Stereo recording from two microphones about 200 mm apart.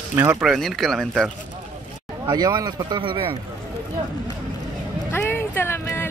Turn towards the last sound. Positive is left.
turn(degrees=10)  # may be behind; listen again after turning